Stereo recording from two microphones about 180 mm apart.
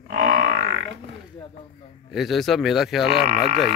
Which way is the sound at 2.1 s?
Centre (ahead or behind).